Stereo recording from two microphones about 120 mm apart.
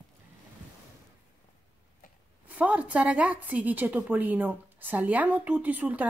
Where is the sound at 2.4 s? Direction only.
10° right (ahead or behind).